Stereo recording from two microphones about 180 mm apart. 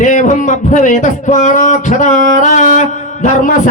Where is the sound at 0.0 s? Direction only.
45° left (ahead or behind).